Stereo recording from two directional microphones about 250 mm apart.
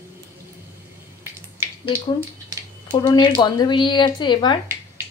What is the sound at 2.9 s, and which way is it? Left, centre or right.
Speech, centre.